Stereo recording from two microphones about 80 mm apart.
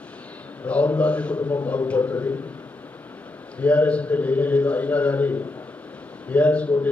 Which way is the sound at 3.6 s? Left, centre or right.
Centre.